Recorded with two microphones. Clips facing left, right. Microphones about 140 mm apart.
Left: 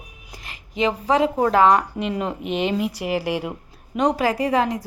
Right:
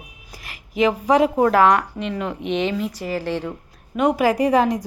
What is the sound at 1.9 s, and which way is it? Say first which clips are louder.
Speech: left 1 dB; 20° left (ahead or behind).